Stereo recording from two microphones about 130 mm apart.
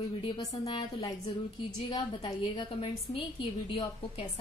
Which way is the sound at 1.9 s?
35° left (ahead or behind).